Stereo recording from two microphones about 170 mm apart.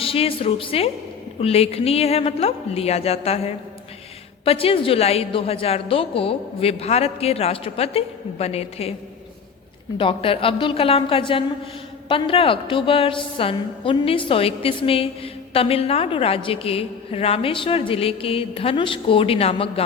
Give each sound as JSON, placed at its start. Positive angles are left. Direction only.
{"t": 0.0, "sound": "a woman's voice", "side_deg": 35}
{"t": 10.0, "sound": "a woman's voice", "side_deg": 30}